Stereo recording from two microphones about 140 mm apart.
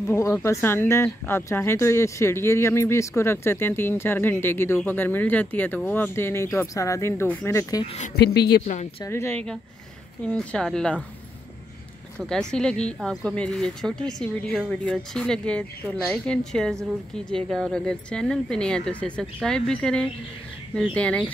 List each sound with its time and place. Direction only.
0.0 s speech: 15° left (ahead or behind)
8.5 s speech: 60° left (ahead or behind)
9.0 s speech: 20° left (ahead or behind)
10.2 s speech: 5° left (ahead or behind)
12.2 s speech: 5° left (ahead or behind)